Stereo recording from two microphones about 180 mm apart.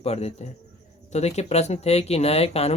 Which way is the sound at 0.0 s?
35° left (ahead or behind).